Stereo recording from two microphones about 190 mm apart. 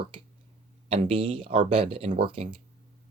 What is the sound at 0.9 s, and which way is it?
Speech, 30° right (ahead or behind).